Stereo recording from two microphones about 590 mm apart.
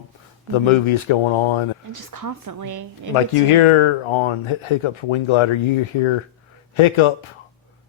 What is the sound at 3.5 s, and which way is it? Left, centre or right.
Speech, left.